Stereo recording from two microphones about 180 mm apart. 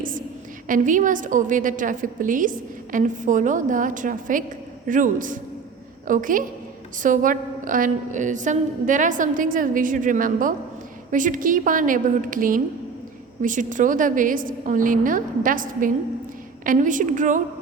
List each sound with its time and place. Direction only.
0.7 s a woman's voice: 45° right (ahead or behind)